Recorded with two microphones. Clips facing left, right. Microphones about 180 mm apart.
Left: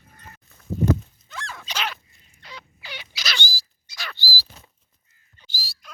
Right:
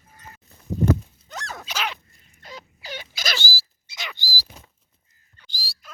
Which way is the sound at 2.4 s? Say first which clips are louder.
Right 3 dB; 45° right (ahead or behind).